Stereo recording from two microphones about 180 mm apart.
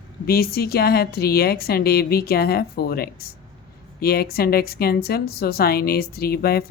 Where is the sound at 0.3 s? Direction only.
55° left (ahead or behind).